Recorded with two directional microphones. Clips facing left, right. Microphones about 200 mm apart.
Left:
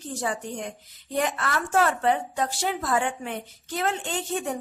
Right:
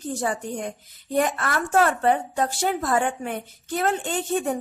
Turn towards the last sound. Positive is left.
turn(degrees=-45)  # may be behind; listen again after turning